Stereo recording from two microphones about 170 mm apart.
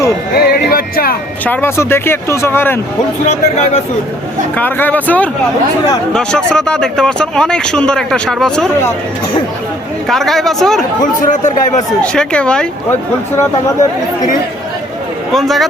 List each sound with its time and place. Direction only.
0.3 s a sound: 65° left (ahead or behind)
1.5 s speech: 15° left (ahead or behind)
3.2 s speech: 35° left (ahead or behind)
4.5 s speech: 10° left (ahead or behind)
10.1 s speech: centre (ahead or behind)
11.2 s a man's voice: 45° left (ahead or behind)
12.0 s speech: 5° left (ahead or behind)
15.3 s speech: centre (ahead or behind)